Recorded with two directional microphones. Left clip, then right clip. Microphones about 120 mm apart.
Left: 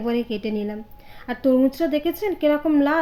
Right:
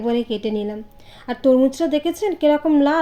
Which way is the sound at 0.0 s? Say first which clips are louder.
Right 3 dB; 35° right (ahead or behind).